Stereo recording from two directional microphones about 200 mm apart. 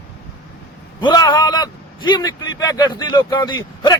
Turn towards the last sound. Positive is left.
turn(degrees=20)  # may be behind; listen again after turning